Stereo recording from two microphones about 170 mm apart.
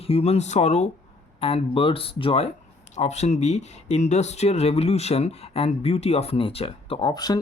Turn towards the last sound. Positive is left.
turn(degrees=25)  # may be behind; listen again after turning